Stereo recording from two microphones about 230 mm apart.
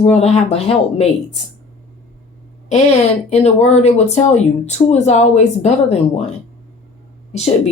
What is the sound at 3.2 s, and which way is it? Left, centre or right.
Speech, left.